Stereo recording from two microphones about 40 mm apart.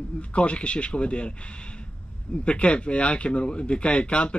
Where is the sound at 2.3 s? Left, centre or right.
Left.